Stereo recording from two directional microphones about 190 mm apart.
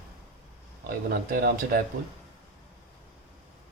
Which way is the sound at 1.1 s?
50° right (ahead or behind).